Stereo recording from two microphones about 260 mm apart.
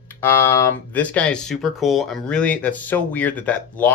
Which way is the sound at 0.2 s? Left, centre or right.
Centre.